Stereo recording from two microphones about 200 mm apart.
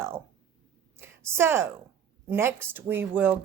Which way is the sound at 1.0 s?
10° right (ahead or behind).